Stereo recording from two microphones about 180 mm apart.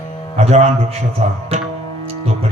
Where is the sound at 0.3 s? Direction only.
35° right (ahead or behind).